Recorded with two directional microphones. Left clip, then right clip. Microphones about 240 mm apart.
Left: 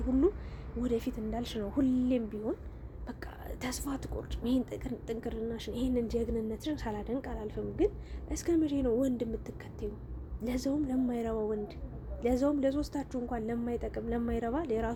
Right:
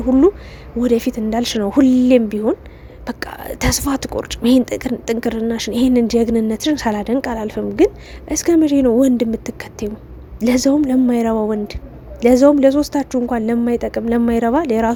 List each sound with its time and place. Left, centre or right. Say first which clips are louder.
0.1 s speech: right 15 dB; right